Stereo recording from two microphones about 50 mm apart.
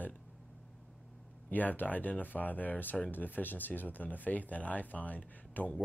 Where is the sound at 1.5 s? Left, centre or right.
Left.